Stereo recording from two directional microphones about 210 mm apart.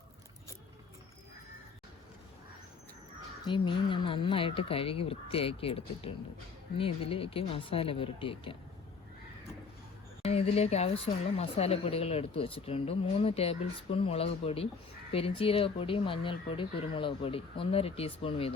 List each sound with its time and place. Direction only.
3.4 s speech: 25° left (ahead or behind)
10.2 s speech: 30° left (ahead or behind)